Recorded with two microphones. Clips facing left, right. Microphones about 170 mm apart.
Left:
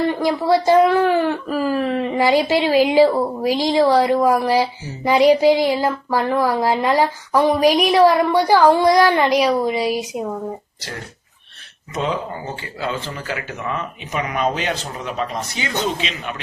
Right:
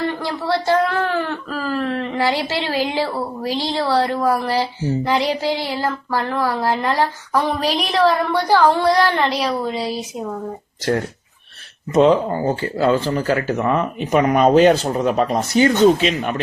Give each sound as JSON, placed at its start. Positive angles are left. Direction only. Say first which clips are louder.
{"t": 0.2, "sound": "speech", "louder": "left 5 dB", "side_deg": 15}
{"t": 12.0, "sound": "speech", "louder": "right 6 dB", "side_deg": -40}